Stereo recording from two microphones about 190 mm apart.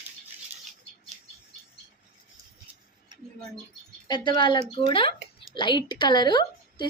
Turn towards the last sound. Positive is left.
turn(degrees=20)  # may be behind; listen again after turning